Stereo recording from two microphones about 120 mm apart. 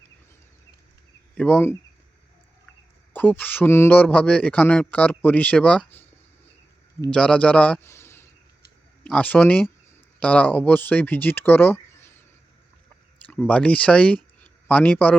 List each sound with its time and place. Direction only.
1.4 s a man's voice: 15° left (ahead or behind)
3.1 s a man's voice: 15° left (ahead or behind)
7.1 s a man's voice: 10° left (ahead or behind)
7.9 s a sound: 20° left (ahead or behind)
9.0 s a man's voice: 10° left (ahead or behind)
13.5 s a man's voice: 10° left (ahead or behind)
14.4 s a sound: 15° left (ahead or behind)